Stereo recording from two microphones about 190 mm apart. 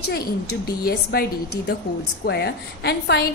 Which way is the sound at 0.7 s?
55° left (ahead or behind).